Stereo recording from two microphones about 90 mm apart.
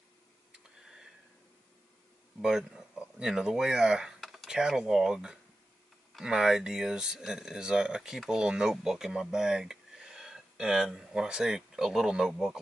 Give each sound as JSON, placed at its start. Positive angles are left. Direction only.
{"t": 2.4, "sound": "speech", "side_deg": -5}